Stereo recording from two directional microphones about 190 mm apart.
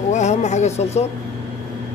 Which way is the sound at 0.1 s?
40° left (ahead or behind).